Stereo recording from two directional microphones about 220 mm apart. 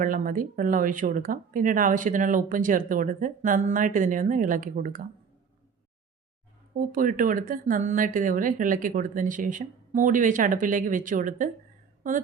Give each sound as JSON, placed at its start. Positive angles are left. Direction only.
{"t": 0.0, "sound": "speech", "side_deg": -35}
{"t": 6.7, "sound": "speech", "side_deg": -40}